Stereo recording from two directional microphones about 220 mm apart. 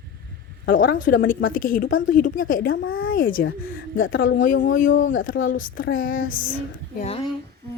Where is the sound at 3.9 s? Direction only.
60° left (ahead or behind).